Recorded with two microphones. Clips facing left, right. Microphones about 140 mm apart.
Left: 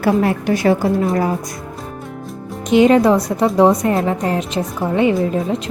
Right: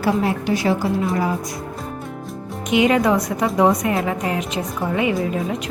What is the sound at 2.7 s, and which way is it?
A woman's voice, 35° left (ahead or behind).